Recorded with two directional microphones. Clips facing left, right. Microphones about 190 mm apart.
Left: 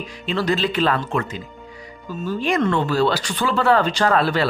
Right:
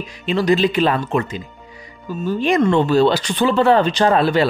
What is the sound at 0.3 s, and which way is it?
Speech, 15° right (ahead or behind).